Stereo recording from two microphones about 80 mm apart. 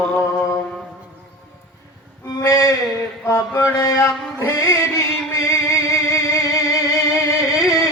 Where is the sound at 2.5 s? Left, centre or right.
Left.